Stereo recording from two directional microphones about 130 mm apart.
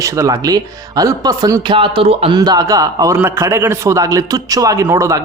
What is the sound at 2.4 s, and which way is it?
Speech, 30° right (ahead or behind).